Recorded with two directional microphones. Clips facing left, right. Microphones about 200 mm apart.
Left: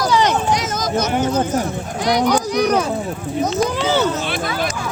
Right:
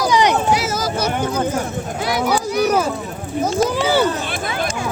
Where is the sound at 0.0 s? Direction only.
15° right (ahead or behind).